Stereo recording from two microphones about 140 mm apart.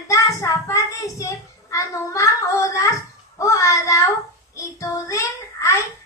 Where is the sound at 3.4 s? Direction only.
20° left (ahead or behind).